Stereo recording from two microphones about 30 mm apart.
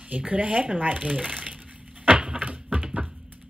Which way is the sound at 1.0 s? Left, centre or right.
Right.